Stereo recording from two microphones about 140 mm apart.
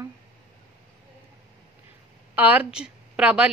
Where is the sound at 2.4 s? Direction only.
10° right (ahead or behind).